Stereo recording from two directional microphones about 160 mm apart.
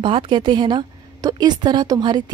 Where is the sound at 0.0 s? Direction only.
30° right (ahead or behind).